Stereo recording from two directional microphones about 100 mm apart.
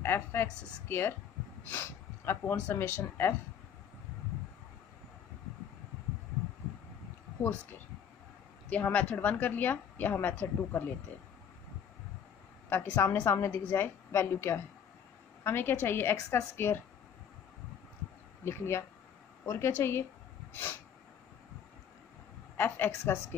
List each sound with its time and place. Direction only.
0.0 s a woman's voice: 25° left (ahead or behind)
8.6 s a woman's voice: 15° left (ahead or behind)
12.6 s a woman's voice: 20° left (ahead or behind)
18.4 s a woman's voice: 25° left (ahead or behind)
22.6 s a woman's voice: 20° left (ahead or behind)